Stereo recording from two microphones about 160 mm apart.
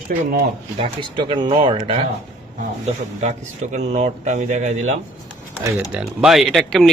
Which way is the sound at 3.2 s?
45° right (ahead or behind).